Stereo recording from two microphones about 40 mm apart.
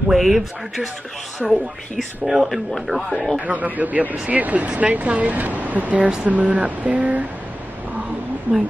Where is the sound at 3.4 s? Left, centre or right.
Right.